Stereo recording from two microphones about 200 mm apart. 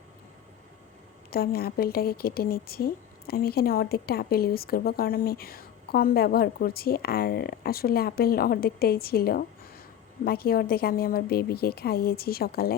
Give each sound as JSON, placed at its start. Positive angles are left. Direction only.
{"t": 1.3, "sound": "speech", "side_deg": 50}